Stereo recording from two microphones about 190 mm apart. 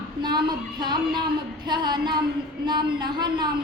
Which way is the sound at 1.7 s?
25° right (ahead or behind).